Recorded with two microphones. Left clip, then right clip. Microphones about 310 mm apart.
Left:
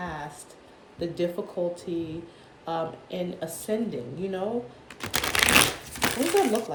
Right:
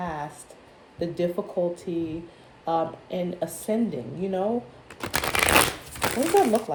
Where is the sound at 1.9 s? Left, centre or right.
Right.